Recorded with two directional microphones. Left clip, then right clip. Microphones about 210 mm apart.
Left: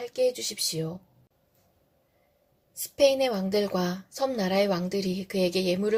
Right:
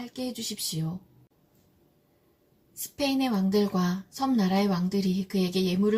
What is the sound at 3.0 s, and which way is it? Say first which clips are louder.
A woman's voice: left 6 dB; 35° left (ahead or behind).